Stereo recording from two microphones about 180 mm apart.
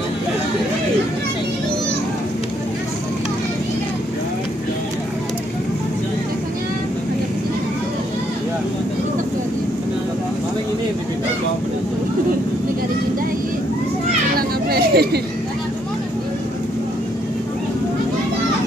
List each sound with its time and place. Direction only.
14.3 s children playing: 60° right (ahead or behind)